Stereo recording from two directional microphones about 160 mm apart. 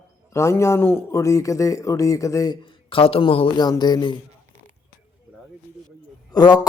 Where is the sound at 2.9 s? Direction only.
35° left (ahead or behind).